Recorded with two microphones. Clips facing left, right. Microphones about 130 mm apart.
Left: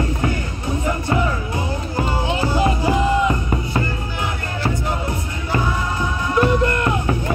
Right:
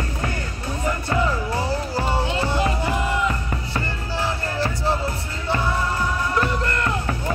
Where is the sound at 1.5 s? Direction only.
35° right (ahead or behind).